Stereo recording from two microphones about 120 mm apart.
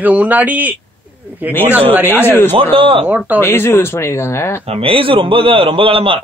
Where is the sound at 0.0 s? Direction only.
15° right (ahead or behind).